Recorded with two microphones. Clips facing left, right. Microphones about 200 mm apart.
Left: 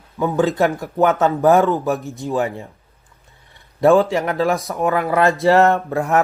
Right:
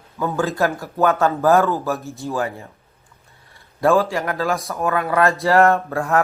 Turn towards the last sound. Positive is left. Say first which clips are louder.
# left 2 dB
turn(degrees=20)  # may be behind; listen again after turning